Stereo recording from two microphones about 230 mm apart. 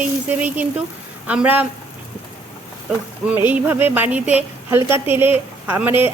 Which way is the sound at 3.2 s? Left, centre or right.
Centre.